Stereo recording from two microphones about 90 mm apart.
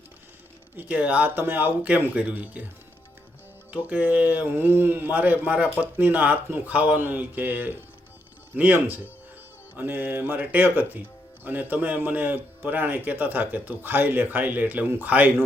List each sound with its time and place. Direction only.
0.8 s a man's voice: 10° right (ahead or behind)
3.7 s a man's voice: 15° right (ahead or behind)